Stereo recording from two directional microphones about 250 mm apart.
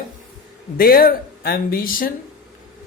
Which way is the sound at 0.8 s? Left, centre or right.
Left.